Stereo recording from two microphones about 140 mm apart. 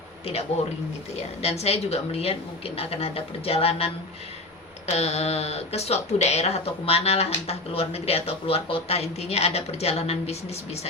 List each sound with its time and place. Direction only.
1.1 s speech: 50° left (ahead or behind)